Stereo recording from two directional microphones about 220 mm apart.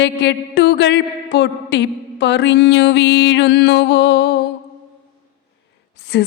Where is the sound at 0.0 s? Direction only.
50° left (ahead or behind).